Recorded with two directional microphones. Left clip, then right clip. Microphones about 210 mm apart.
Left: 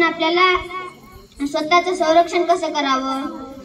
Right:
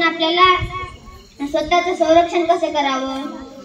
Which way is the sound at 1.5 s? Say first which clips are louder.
Even; 25° left (ahead or behind).